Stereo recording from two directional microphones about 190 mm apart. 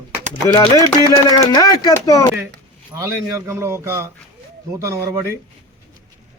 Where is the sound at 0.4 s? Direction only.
20° left (ahead or behind).